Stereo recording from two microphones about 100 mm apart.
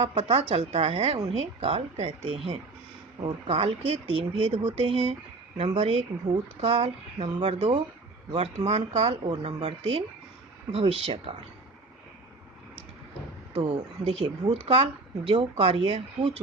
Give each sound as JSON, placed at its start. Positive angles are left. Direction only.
{"t": 0.2, "sound": "a woman's voice", "side_deg": -90}
{"t": 4.8, "sound": "a woman's voice", "side_deg": -80}
{"t": 5.5, "sound": "speech", "side_deg": -70}
{"t": 7.4, "sound": "speech", "side_deg": -90}
{"t": 9.0, "sound": "speech", "side_deg": -50}
{"t": 9.4, "sound": "speech", "side_deg": -70}
{"t": 10.7, "sound": "speech", "side_deg": -80}
{"t": 13.6, "sound": "speech", "side_deg": -60}